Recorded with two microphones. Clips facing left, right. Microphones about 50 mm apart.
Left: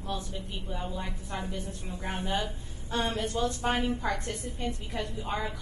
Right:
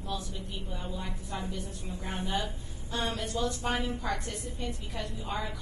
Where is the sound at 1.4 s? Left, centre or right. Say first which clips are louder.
Left 1 dB; left.